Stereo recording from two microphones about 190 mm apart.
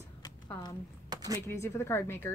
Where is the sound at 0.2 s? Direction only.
20° left (ahead or behind).